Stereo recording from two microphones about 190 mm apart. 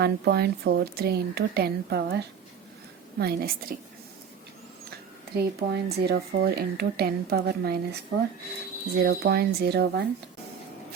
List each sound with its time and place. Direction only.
0.0 s a woman's voice: 55° right (ahead or behind)
4.9 s speech: 55° right (ahead or behind)
9.0 s speech: 55° right (ahead or behind)